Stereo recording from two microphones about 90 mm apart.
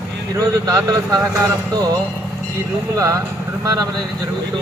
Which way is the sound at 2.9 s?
40° right (ahead or behind).